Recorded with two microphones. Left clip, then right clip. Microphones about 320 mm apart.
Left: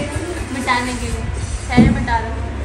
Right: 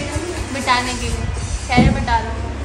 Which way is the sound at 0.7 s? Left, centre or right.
Centre.